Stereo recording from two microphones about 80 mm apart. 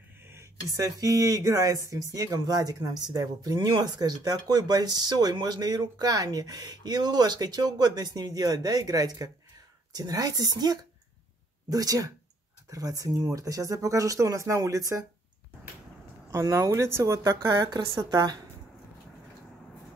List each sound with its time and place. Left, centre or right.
0.2 s a sound: right
0.7 s speech: right
16.3 s speech: right